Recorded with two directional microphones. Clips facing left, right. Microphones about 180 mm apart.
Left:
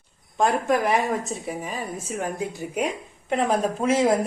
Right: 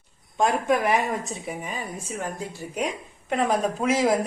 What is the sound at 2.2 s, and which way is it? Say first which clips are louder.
Speech: left 5 dB; 20° left (ahead or behind).